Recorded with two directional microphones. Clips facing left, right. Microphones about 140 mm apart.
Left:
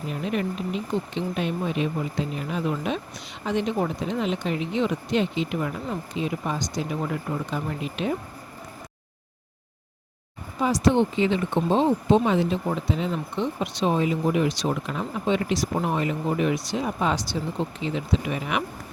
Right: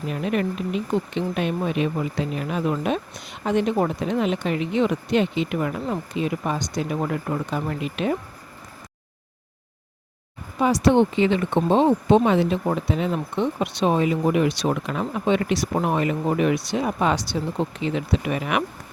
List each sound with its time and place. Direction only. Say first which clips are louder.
0.1 s speech: right 3 dB; 60° right (ahead or behind)
10.6 s speech: right 3 dB; 65° right (ahead or behind)